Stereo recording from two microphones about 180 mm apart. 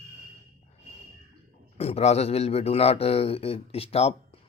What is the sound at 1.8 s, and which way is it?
Speech, 35° left (ahead or behind).